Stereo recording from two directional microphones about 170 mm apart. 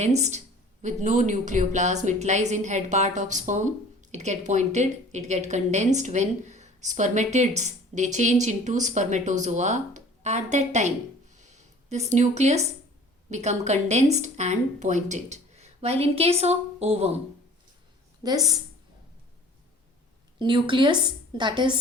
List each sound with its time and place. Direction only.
0.0 s speech: 40° right (ahead or behind)
11.3 s a sound: 45° right (ahead or behind)
13.3 s a woman's voice: 40° right (ahead or behind)
18.2 s a woman's voice: 20° right (ahead or behind)
20.4 s a woman's voice: 30° right (ahead or behind)